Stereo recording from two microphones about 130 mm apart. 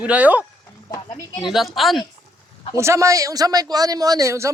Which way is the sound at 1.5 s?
Centre (ahead or behind).